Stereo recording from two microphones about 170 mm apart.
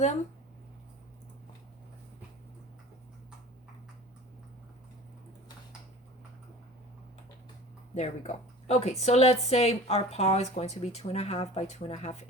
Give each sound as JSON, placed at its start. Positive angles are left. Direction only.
{"t": 7.9, "sound": "speech", "side_deg": 40}